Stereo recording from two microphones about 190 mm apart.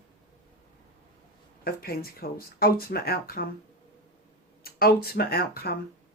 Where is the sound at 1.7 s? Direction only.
50° left (ahead or behind).